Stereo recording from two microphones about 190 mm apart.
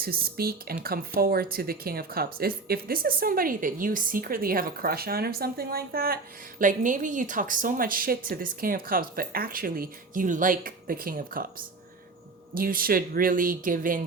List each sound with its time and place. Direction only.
0.0 s speech: 50° right (ahead or behind)
12.5 s speech: 50° right (ahead or behind)